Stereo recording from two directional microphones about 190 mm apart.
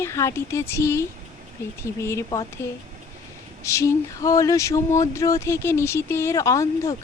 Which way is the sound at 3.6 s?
15° left (ahead or behind).